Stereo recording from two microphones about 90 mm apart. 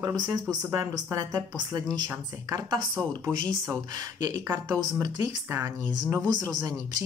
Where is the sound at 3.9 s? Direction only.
40° right (ahead or behind).